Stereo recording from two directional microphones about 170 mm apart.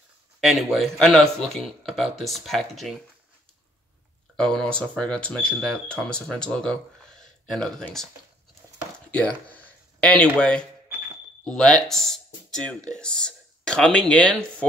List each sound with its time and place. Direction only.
0.4 s speech: centre (ahead or behind)
4.4 s speech: 5° left (ahead or behind)
8.9 s a sound: 10° left (ahead or behind)
11.4 s speech: 5° left (ahead or behind)